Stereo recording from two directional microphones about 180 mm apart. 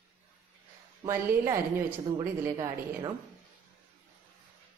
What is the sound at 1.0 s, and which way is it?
Speech, 15° right (ahead or behind).